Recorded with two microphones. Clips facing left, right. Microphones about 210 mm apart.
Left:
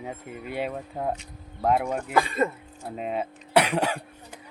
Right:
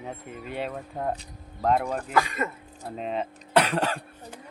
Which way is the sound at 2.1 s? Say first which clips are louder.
Left 3 dB; 30° left (ahead or behind).